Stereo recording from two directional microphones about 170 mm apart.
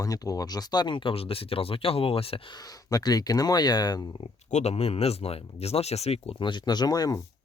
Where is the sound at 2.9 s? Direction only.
20° left (ahead or behind).